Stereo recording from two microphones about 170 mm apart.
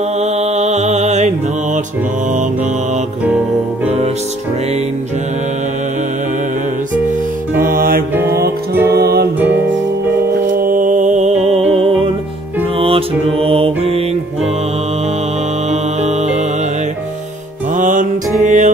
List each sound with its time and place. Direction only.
0.2 s music: 40° right (ahead or behind)
7.7 s music: 60° right (ahead or behind)
8.7 s music: 15° right (ahead or behind)
9.0 s music: 70° right (ahead or behind)
10.4 s music: 55° right (ahead or behind); by 14.0 s 35° right (ahead or behind)
15.7 s music: 40° right (ahead or behind)
17.7 s music: 50° right (ahead or behind)